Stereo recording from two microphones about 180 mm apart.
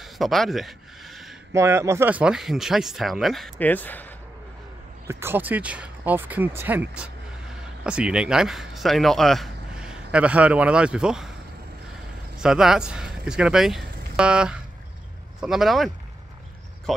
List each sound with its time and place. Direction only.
0.0 s speech: centre (ahead or behind)
1.5 s speech: 15° right (ahead or behind); by 4.1 s 10° left (ahead or behind)
5.0 s speech: 10° right (ahead or behind)
12.4 s speech: 5° right (ahead or behind)